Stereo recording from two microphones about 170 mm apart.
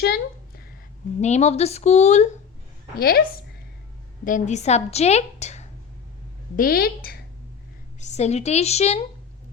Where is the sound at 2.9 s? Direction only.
60° left (ahead or behind).